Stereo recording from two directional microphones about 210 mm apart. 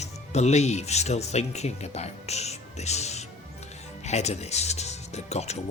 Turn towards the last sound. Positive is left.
turn(degrees=30)  # may be behind; listen again after turning